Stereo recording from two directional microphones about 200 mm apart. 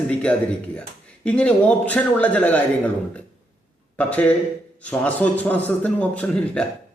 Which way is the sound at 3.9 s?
5° left (ahead or behind).